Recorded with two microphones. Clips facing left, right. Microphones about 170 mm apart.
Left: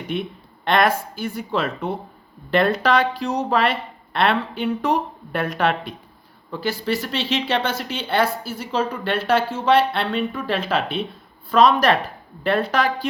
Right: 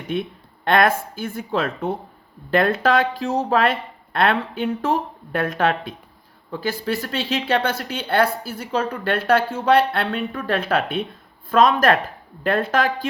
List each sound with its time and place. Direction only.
0.7 s speech: 50° right (ahead or behind)